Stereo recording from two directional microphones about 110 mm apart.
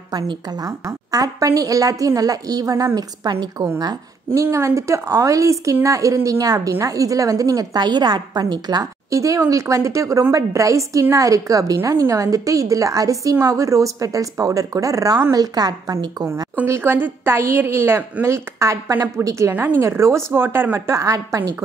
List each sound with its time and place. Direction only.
0.1 s a woman's voice: 35° right (ahead or behind)
3.8 s a woman's voice: 25° right (ahead or behind)
16.6 s a woman's voice: 25° right (ahead or behind)